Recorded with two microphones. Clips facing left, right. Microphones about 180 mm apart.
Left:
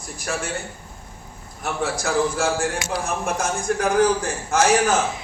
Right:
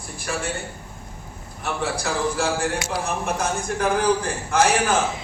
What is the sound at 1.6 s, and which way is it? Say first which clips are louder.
A man's voice: left 1 dB; 45° left (ahead or behind).